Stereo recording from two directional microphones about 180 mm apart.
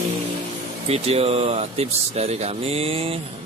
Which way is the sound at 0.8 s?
35° right (ahead or behind).